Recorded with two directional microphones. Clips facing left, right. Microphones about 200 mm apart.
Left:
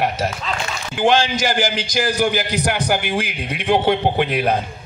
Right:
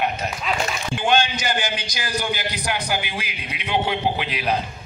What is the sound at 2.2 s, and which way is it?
A man's voice, 45° left (ahead or behind).